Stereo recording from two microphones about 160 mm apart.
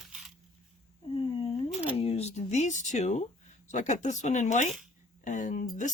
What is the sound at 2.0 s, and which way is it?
Speech, 40° left (ahead or behind).